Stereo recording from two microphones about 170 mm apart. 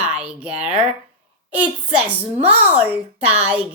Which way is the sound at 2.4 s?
35° right (ahead or behind).